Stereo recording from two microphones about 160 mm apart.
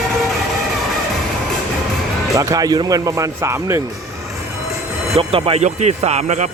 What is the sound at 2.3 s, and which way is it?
Speech, 20° right (ahead or behind).